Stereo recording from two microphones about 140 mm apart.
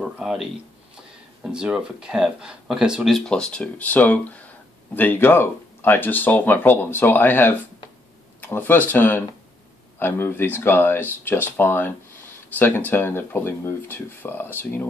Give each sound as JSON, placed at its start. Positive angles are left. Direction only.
{"t": 0.0, "sound": "speech", "side_deg": -5}